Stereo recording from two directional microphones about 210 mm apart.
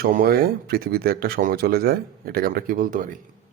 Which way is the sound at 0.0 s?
45° right (ahead or behind).